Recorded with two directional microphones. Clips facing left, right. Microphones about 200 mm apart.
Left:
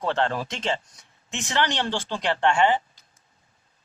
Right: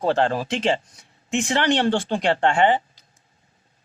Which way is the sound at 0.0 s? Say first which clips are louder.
Right 4 dB; 30° right (ahead or behind).